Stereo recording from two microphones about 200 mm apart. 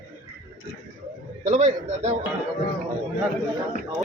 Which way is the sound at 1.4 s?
35° right (ahead or behind).